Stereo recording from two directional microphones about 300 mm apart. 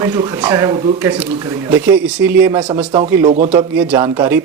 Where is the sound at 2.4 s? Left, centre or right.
Centre.